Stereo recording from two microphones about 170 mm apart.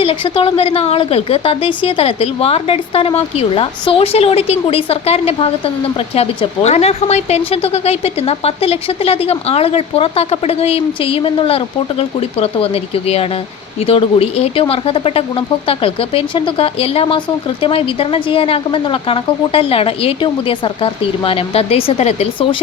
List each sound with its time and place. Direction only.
0.0 s a woman's voice: 35° left (ahead or behind)